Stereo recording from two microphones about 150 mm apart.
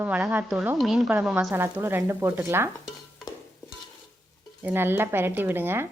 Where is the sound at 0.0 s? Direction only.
15° right (ahead or behind).